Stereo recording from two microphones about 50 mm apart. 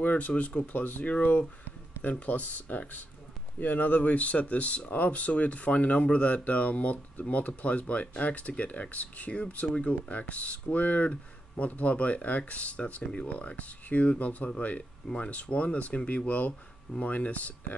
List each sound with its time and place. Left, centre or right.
0.0 s speech: left